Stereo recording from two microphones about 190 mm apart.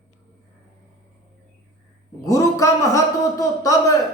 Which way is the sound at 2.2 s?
15° left (ahead or behind).